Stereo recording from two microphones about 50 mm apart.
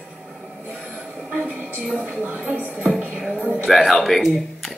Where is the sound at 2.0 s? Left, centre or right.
Right.